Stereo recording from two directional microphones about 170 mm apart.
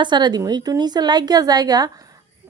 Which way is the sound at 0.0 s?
25° right (ahead or behind).